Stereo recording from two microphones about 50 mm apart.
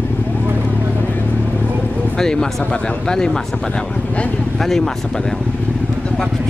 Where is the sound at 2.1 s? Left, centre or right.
Centre.